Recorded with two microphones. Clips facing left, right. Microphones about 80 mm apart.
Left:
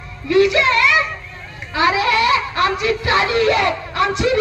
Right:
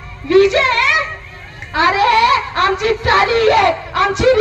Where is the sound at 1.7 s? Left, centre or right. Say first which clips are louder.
Right 4 dB; right.